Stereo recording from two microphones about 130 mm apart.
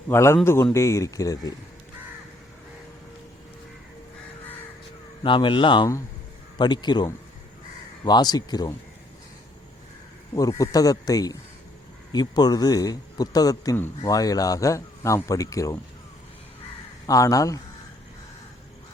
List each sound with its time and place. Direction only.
0.1 s speech: 20° left (ahead or behind)
5.2 s speech: 40° left (ahead or behind)
10.6 s speech: 25° left (ahead or behind)
17.1 s speech: 25° left (ahead or behind)